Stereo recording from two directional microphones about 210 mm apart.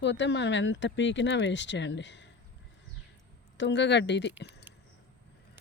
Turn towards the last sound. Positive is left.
turn(degrees=55)  # may be behind; listen again after turning